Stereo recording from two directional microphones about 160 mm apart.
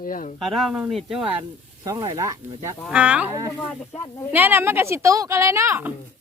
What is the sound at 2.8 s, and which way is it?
Speech, 5° right (ahead or behind).